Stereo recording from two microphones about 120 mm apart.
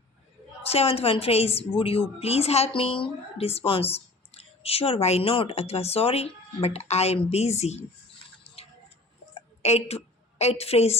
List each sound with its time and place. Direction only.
0.6 s a woman's voice: 55° left (ahead or behind)
9.6 s a woman's voice: 65° left (ahead or behind)